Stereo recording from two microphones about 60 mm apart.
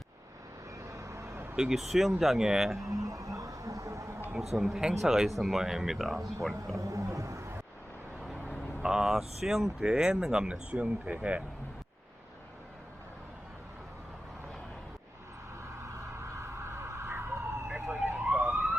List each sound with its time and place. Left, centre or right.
0.9 s vehicle: right
1.5 s speech: centre
2.8 s music: right
4.4 s speech: centre
6.7 s roaring cats: right
8.8 s speech: centre
16.4 s a sound: right
18.2 s police car: right